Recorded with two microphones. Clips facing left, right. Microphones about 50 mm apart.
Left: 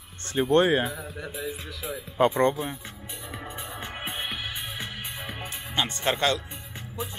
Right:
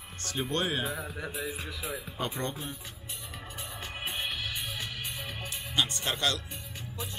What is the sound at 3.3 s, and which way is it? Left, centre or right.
Music, left.